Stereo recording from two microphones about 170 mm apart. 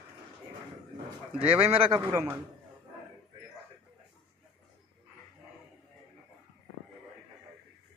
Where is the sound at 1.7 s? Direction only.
35° right (ahead or behind).